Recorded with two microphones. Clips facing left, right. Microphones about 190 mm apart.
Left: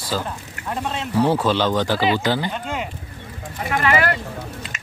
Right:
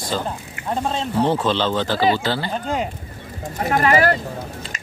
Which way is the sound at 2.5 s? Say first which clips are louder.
Right 4 dB; 35° right (ahead or behind).